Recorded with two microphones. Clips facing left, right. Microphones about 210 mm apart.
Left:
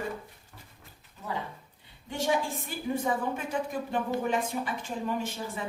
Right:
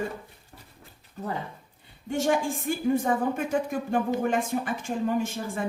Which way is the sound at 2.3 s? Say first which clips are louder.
Right 3 dB; 50° right (ahead or behind).